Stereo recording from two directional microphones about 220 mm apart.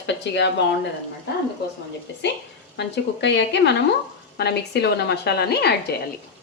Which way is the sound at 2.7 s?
50° left (ahead or behind).